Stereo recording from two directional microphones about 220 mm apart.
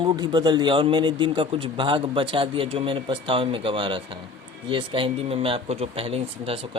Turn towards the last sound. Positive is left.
turn(degrees=-25)  # may be behind; listen again after turning